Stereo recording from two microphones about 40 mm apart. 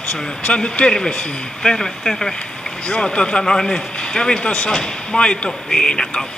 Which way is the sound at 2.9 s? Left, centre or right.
Left.